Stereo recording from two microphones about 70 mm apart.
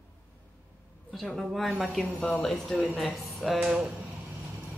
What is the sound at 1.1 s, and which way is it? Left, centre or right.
Speech, centre.